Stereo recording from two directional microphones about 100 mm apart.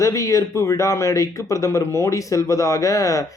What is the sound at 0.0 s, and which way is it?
Speech, 35° left (ahead or behind).